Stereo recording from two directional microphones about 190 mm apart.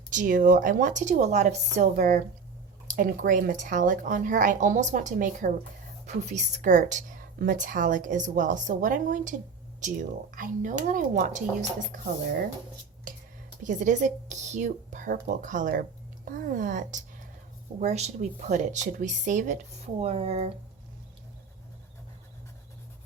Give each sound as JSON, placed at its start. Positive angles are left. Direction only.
{"t": 0.1, "sound": "speech", "side_deg": -45}
{"t": 13.7, "sound": "speech", "side_deg": -40}